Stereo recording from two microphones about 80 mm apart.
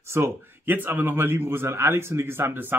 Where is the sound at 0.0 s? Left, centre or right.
Right.